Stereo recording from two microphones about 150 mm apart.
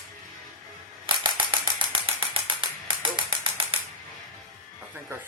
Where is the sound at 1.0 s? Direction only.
35° right (ahead or behind).